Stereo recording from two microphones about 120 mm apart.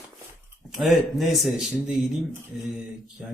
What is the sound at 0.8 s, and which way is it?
Speech, centre (ahead or behind).